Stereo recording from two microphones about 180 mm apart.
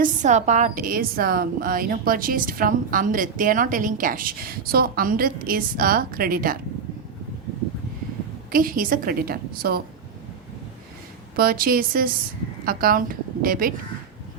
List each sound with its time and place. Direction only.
0.0 s a woman's voice: 40° right (ahead or behind)
8.5 s a woman's voice: 50° right (ahead or behind)
11.3 s a woman's voice: 55° right (ahead or behind)